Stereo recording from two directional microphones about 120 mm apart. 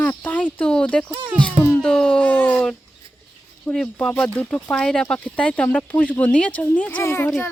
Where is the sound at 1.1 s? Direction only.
40° right (ahead or behind).